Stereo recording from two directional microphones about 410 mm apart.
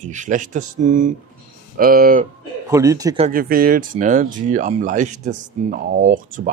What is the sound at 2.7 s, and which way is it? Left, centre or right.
Speech, centre.